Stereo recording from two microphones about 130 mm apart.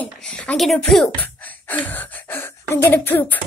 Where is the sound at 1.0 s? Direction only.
10° left (ahead or behind).